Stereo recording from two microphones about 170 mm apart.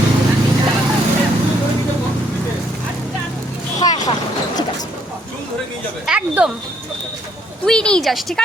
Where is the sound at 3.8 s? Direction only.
20° left (ahead or behind).